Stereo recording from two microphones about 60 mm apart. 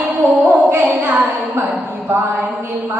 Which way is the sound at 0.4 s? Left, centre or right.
Right.